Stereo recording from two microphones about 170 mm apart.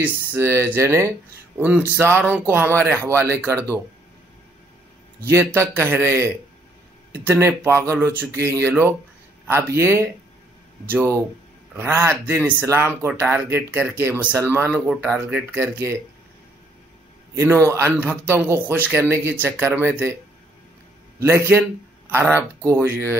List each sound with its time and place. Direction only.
0.0 s speech: 15° right (ahead or behind)
5.2 s speech: 15° right (ahead or behind)
17.4 s speech: 15° right (ahead or behind)
21.2 s speech: 15° right (ahead or behind)